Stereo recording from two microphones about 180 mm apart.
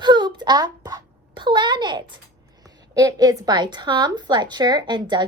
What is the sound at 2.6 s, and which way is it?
A woman's voice, 20° right (ahead or behind).